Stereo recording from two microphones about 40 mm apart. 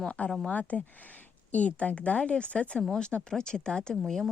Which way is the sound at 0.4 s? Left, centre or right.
Left.